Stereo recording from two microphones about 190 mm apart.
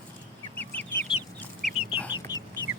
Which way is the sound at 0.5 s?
10° left (ahead or behind).